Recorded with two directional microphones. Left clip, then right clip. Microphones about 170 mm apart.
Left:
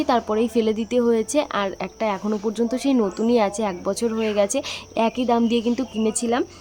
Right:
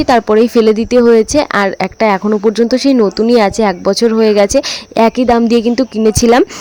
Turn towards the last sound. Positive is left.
turn(degrees=-55)  # may be behind; listen again after turning